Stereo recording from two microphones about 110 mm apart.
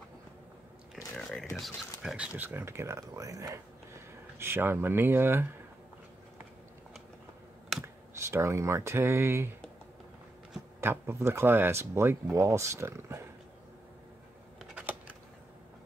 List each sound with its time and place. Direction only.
1.1 s music: 5° left (ahead or behind)
2.1 s speech: 15° right (ahead or behind)
7.8 s speech: 25° right (ahead or behind)
10.8 s speech: 25° right (ahead or behind)
14.6 s a sound: 10° right (ahead or behind)